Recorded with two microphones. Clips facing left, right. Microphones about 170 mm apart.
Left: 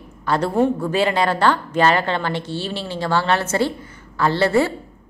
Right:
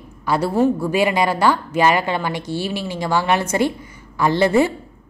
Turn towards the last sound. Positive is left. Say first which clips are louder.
# right 2 dB
turn(degrees=-15)  # may be behind; listen again after turning